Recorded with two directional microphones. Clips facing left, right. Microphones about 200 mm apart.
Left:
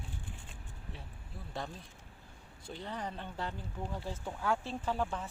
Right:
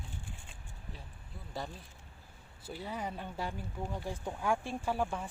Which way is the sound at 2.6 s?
5° right (ahead or behind).